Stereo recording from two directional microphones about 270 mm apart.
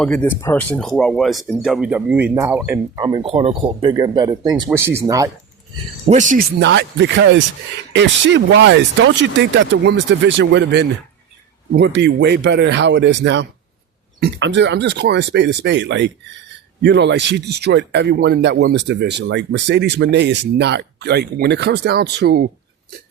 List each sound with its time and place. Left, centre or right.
0.0 s speech: centre
3.0 s speech: centre
6.1 s speech: right
6.6 s speech: right